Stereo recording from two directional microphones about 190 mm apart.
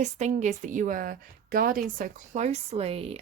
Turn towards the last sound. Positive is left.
turn(degrees=-30)  # may be behind; listen again after turning